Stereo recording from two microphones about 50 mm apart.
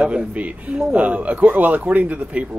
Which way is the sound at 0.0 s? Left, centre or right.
Right.